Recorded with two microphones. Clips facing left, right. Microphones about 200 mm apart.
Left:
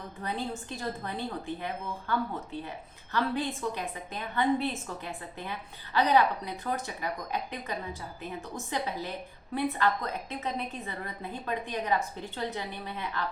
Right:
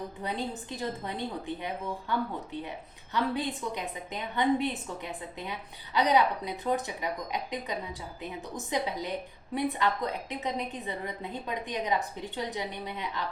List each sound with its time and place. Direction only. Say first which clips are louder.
0.2 s a woman's voice: left 2 dB; 15° right (ahead or behind)